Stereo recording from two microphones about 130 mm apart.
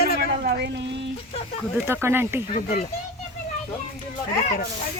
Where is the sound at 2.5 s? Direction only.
80° left.